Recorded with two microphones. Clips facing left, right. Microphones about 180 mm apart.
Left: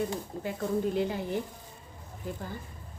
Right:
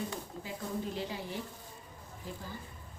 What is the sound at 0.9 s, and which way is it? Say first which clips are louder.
A woman's voice: left 8 dB; 55° left (ahead or behind).